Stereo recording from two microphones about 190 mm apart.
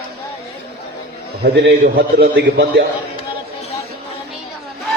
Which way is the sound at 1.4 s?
60° right (ahead or behind).